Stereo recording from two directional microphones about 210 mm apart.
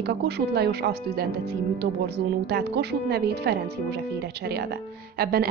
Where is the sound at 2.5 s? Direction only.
50° right (ahead or behind).